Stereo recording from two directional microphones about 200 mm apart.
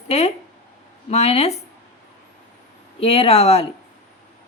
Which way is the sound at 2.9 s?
30° left (ahead or behind).